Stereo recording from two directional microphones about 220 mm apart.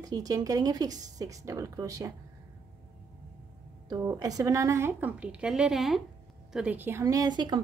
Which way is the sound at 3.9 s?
15° right (ahead or behind).